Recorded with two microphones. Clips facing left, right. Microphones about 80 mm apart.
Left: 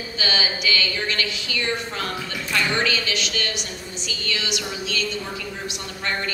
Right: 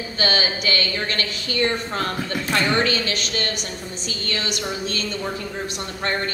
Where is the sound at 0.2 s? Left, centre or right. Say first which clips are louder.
Right 3 dB; right.